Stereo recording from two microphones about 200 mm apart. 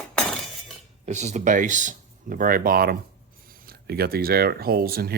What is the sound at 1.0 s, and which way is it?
Speech, 35° right (ahead or behind).